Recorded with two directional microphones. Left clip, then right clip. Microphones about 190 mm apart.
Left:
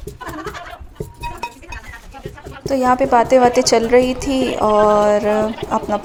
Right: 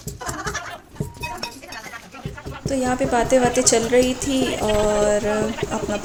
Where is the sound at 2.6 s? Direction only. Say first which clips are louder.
Left 7 dB; 25° left (ahead or behind).